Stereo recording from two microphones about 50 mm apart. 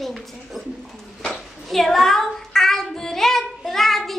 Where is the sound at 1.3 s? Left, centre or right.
Centre.